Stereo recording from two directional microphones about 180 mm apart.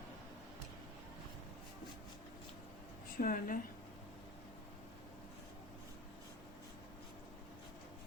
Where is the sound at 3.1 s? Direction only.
50° left (ahead or behind).